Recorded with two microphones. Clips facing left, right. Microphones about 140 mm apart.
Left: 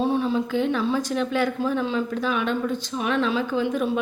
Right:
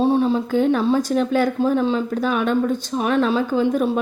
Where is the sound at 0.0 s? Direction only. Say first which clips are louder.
Right 5 dB; 30° right (ahead or behind).